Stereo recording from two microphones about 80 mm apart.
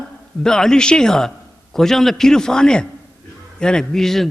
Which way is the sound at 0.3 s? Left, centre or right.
Centre.